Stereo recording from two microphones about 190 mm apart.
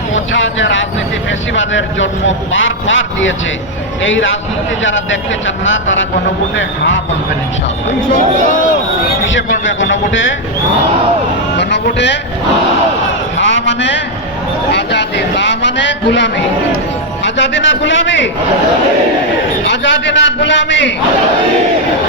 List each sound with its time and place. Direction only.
0.1 s a man's voice: 85° left
6.6 s a man's voice: 75° left (ahead or behind)
9.6 s a man's voice: 80° left
11.5 s a man's voice: 65° left (ahead or behind)
13.4 s a sound: 75° left (ahead or behind)
14.7 s a man's voice: 65° left (ahead or behind)
19.6 s a man's voice: 75° left (ahead or behind)